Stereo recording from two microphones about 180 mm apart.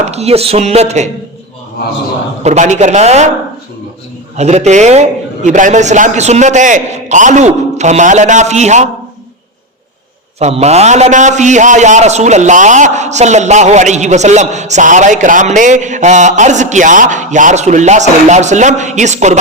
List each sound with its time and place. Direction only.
0.0 s a man's voice: 35° right (ahead or behind)
2.4 s a man's voice: 40° right (ahead or behind)
4.4 s a man's voice: 40° right (ahead or behind)
10.4 s a man's voice: 35° right (ahead or behind)